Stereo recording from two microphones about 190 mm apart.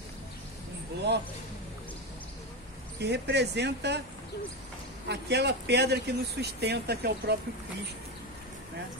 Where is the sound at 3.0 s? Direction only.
60° right (ahead or behind).